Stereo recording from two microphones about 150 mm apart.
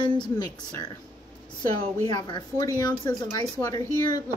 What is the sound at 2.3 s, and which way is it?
Speech, 25° left (ahead or behind).